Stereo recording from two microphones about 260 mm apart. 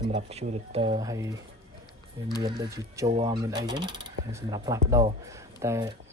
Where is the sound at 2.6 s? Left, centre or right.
Centre.